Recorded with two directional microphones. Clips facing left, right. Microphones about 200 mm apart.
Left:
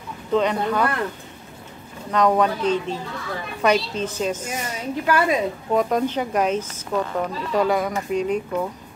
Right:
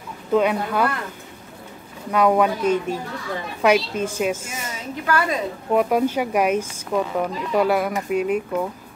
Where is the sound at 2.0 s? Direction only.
10° right (ahead or behind).